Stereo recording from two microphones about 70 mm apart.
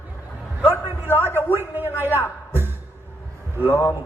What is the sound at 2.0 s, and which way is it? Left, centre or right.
Speech, left.